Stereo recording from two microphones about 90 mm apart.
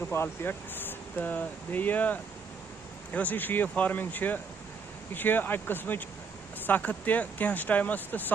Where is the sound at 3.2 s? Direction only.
20° left (ahead or behind).